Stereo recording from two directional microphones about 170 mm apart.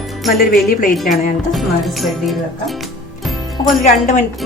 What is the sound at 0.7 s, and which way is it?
Speech, 55° left (ahead or behind).